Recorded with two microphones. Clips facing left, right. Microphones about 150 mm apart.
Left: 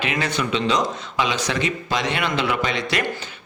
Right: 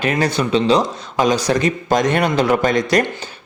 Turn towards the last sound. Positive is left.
turn(degrees=-45)  # may be behind; listen again after turning